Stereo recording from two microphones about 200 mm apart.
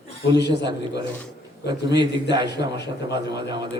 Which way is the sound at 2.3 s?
60° left (ahead or behind).